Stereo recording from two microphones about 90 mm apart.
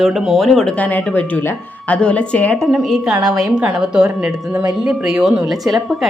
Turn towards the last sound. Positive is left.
turn(degrees=-5)  # may be behind; listen again after turning